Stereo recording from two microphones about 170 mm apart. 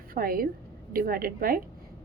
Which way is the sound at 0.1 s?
60° right (ahead or behind).